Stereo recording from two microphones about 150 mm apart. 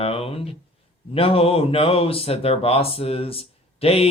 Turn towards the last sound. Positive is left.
turn(degrees=40)  # may be behind; listen again after turning